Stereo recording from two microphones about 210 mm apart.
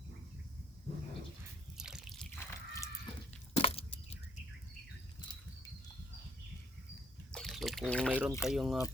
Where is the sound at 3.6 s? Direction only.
25° left (ahead or behind).